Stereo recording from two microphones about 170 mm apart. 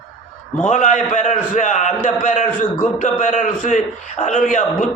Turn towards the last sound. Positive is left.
turn(degrees=50)  # may be behind; listen again after turning